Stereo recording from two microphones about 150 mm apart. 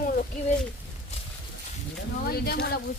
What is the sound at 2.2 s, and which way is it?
Speech, 90° left.